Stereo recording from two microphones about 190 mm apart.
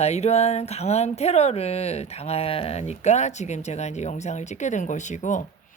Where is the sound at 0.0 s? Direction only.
35° left (ahead or behind).